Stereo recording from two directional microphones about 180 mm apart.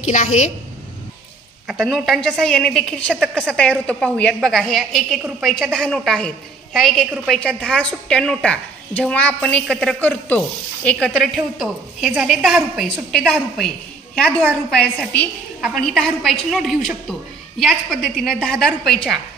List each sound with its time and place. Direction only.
0.0 s a woman's voice: 40° left (ahead or behind)
1.7 s a woman's voice: centre (ahead or behind)